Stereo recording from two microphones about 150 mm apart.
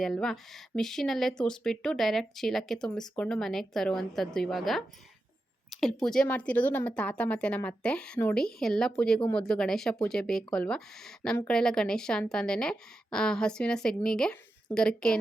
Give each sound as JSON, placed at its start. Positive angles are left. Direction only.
{"t": 0.0, "sound": "speech", "side_deg": 0}
{"t": 5.8, "sound": "a woman's voice", "side_deg": 5}